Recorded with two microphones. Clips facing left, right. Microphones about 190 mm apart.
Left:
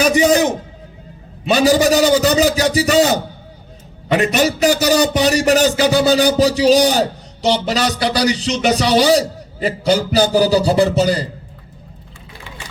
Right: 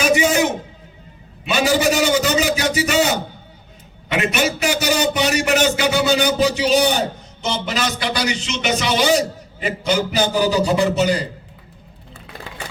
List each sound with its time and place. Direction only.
0.0 s a man's voice: 40° left (ahead or behind)